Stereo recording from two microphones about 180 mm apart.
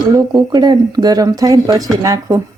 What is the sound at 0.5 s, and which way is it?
A woman's voice, 20° right (ahead or behind).